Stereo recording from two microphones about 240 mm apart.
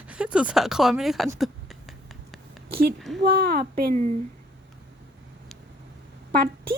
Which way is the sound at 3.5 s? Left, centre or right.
Right.